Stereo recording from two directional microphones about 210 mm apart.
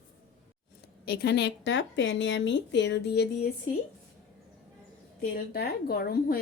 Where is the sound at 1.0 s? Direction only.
50° left (ahead or behind).